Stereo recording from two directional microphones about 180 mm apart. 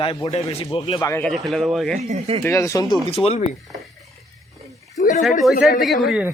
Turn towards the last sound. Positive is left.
turn(degrees=-5)  # may be behind; listen again after turning